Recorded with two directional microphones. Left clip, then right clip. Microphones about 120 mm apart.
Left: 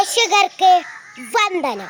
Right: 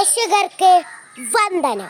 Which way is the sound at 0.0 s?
30° right (ahead or behind).